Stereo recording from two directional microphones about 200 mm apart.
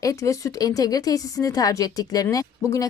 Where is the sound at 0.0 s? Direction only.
15° left (ahead or behind).